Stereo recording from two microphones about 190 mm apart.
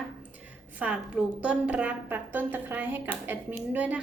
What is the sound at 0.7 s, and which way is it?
A woman's voice, 5° right (ahead or behind).